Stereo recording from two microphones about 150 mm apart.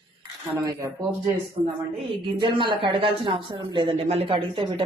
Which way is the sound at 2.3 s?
30° right (ahead or behind).